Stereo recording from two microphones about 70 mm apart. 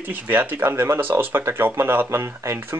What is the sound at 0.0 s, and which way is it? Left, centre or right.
Speech, right.